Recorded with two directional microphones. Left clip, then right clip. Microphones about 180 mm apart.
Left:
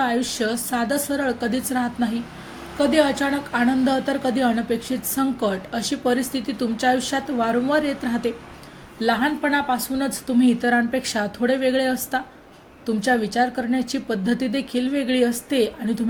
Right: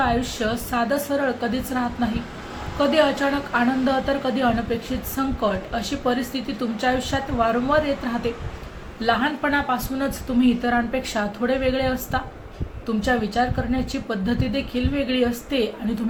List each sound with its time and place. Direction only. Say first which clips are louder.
0.0 s speech: even; 50° left (ahead or behind)